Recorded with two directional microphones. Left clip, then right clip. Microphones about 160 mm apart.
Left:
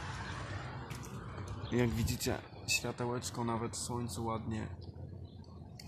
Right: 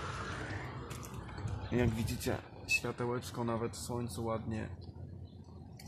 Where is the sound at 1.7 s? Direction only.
Centre (ahead or behind).